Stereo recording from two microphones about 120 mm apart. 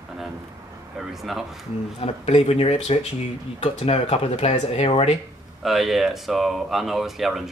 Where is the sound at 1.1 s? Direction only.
Centre (ahead or behind).